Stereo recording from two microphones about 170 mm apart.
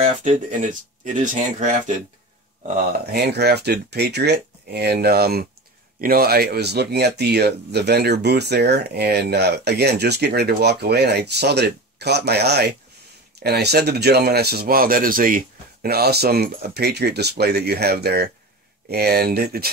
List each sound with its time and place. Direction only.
0.0 s speech: 45° right (ahead or behind)
3.1 s speech: 75° right (ahead or behind)